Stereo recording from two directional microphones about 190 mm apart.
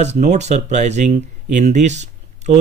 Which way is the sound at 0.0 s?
35° right (ahead or behind).